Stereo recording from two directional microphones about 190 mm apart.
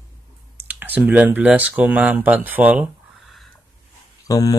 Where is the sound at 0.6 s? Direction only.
10° right (ahead or behind).